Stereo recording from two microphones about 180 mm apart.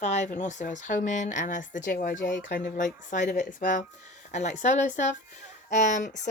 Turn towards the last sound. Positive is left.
turn(degrees=45)  # may be behind; listen again after turning